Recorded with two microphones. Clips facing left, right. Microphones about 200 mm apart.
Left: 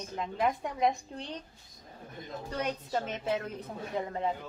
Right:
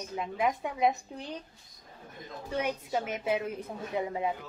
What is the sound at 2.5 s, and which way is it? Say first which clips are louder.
A woman's voice: right 2 dB; 10° right (ahead or behind).